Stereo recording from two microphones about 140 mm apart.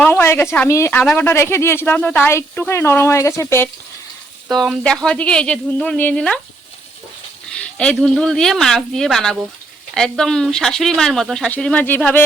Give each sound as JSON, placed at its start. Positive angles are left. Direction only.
{"t": 0.0, "sound": "speech", "side_deg": 15}
{"t": 4.5, "sound": "speech", "side_deg": 0}
{"t": 7.5, "sound": "speech", "side_deg": 10}